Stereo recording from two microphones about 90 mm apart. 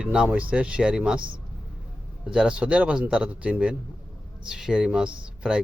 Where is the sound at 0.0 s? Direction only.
10° right (ahead or behind).